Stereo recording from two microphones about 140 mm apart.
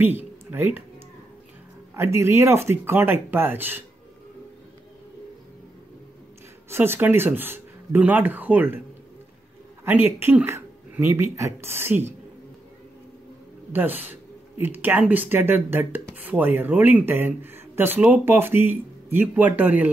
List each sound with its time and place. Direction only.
0.0 s speech: 15° right (ahead or behind)
2.0 s speech: 20° right (ahead or behind)
6.7 s speech: 15° right (ahead or behind)
9.8 s speech: 15° right (ahead or behind)
13.7 s speech: 15° right (ahead or behind)